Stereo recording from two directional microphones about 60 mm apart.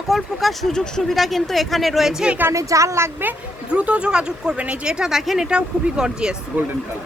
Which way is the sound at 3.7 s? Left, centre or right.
Centre.